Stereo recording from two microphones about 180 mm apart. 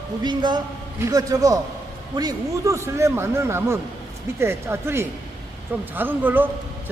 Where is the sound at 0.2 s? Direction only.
25° right (ahead or behind).